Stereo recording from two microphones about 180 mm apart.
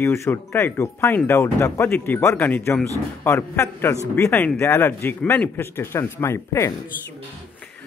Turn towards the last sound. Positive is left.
turn(degrees=15)  # may be behind; listen again after turning